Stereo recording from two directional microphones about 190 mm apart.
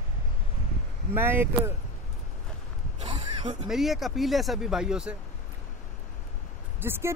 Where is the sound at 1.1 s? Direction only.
10° right (ahead or behind).